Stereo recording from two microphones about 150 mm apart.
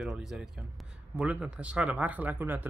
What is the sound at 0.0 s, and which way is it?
Speech, centre (ahead or behind).